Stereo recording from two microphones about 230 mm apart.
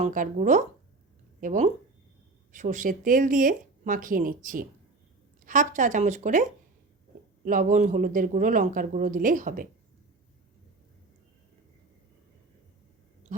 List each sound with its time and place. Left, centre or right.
0.0 s speech: right